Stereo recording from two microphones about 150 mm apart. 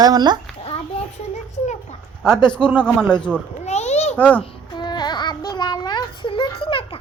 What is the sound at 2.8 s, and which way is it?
Speech, 5° left (ahead or behind).